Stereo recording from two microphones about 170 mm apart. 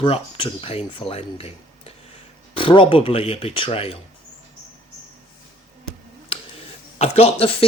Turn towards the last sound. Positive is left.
turn(degrees=35)  # may be behind; listen again after turning